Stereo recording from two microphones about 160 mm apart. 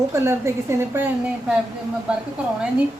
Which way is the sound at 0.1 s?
15° right (ahead or behind).